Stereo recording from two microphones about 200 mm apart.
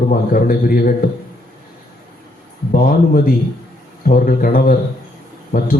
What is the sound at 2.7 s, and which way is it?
A man's voice, 45° left (ahead or behind).